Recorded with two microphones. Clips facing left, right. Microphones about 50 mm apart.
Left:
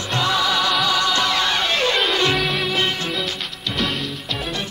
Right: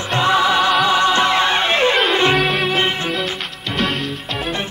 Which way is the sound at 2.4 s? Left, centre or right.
Centre.